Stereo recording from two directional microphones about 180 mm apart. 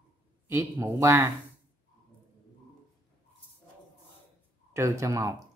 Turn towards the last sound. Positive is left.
turn(degrees=-15)  # may be behind; listen again after turning